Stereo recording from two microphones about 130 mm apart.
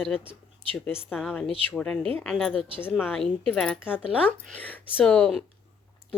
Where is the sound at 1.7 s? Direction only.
5° left (ahead or behind).